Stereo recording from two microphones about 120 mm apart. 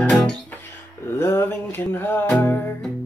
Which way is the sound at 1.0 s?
20° left (ahead or behind).